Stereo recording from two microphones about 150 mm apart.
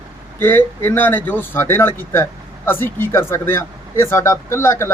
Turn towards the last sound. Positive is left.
turn(degrees=15)  # may be behind; listen again after turning